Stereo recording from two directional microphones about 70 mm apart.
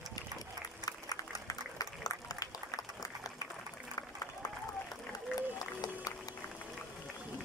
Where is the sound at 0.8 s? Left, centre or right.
Left.